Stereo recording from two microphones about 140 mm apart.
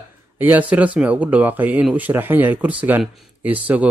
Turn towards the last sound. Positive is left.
turn(degrees=-10)  # may be behind; listen again after turning